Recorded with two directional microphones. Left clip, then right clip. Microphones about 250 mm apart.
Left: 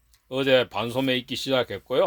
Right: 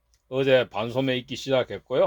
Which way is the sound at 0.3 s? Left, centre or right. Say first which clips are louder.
Even; centre.